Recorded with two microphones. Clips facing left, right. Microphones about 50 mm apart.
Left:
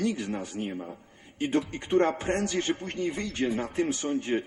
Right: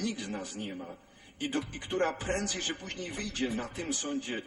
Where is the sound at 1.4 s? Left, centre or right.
Left.